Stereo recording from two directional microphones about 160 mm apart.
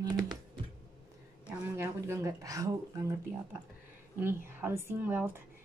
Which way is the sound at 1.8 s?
15° right (ahead or behind).